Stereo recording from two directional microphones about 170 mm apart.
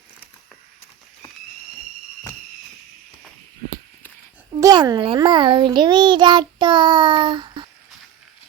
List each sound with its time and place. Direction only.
4.6 s a child's voice: 25° right (ahead or behind)